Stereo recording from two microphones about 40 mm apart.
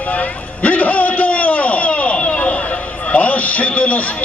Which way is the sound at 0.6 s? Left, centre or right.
Left.